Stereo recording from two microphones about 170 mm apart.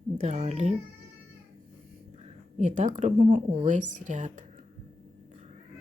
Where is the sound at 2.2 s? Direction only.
45° right (ahead or behind).